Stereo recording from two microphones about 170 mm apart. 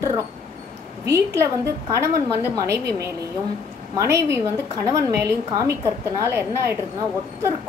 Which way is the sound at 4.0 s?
15° right (ahead or behind).